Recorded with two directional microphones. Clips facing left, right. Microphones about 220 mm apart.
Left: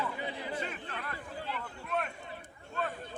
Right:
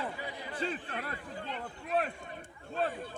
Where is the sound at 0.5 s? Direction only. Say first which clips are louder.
Right 2 dB; 30° right (ahead or behind).